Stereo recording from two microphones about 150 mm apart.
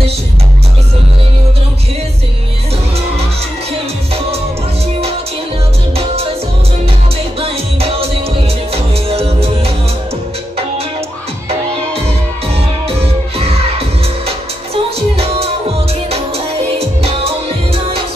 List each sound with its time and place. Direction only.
7.3 s music: 40° right (ahead or behind)
12.8 s music: 40° right (ahead or behind)